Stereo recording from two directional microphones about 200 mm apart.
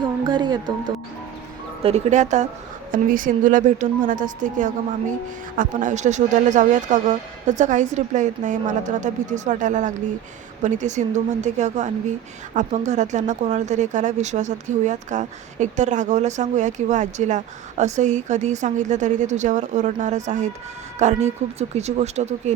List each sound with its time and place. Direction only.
0.3 s speech: 25° right (ahead or behind)
1.8 s speech: 35° right (ahead or behind)